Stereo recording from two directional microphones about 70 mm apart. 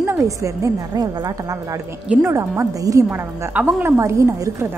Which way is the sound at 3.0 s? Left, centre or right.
Right.